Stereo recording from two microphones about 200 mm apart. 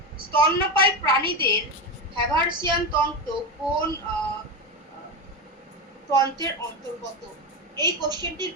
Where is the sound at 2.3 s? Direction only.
20° right (ahead or behind).